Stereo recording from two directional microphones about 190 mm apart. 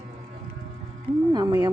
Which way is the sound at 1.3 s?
20° right (ahead or behind).